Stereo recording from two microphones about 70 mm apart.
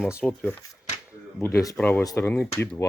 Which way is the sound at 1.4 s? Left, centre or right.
Left.